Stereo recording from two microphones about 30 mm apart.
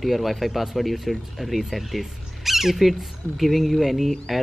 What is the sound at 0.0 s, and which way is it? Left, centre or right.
Speech, centre.